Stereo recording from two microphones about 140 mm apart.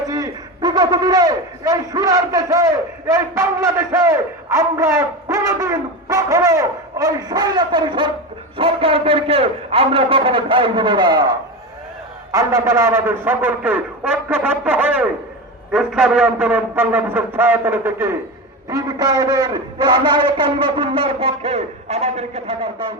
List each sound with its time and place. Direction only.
0.1 s a man's voice: 30° right (ahead or behind)